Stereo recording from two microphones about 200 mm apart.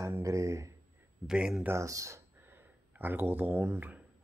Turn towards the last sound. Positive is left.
turn(degrees=-10)  # may be behind; listen again after turning